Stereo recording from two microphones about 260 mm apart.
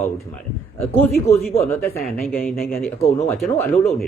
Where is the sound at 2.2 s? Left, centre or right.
Left.